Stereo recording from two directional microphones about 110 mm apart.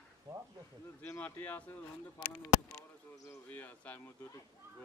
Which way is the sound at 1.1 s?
15° left (ahead or behind).